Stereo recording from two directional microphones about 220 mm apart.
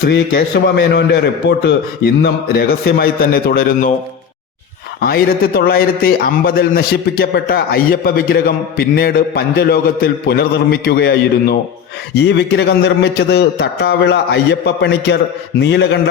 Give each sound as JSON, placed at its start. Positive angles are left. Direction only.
{"t": 0.0, "sound": "a man's voice", "side_deg": 45}
{"t": 4.9, "sound": "a man's voice", "side_deg": 45}